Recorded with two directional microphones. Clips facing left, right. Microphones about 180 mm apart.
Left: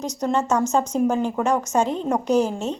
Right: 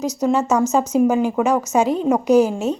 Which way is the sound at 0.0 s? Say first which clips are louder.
Right 4 dB; 5° right (ahead or behind).